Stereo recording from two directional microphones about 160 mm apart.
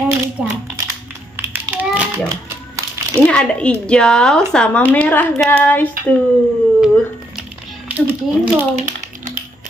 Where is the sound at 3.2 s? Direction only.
5° left (ahead or behind).